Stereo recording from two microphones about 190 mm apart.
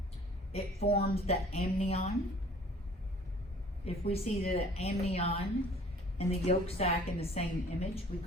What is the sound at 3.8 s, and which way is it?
A woman's voice, 30° left (ahead or behind).